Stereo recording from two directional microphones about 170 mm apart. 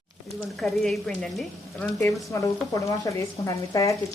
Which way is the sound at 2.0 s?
20° left (ahead or behind).